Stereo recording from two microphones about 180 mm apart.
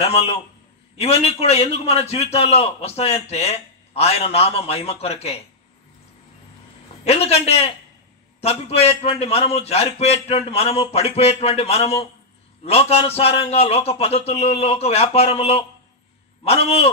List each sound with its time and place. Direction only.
0.0 s a man's voice: 35° left (ahead or behind)
7.1 s a man's voice: 35° left (ahead or behind)